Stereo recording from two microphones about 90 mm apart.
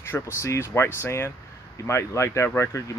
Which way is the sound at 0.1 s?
30° left (ahead or behind).